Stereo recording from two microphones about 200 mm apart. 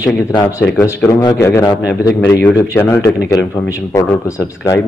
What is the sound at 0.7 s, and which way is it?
A man's voice, 15° left (ahead or behind).